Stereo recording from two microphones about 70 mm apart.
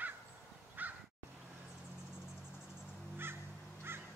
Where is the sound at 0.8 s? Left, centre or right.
Right.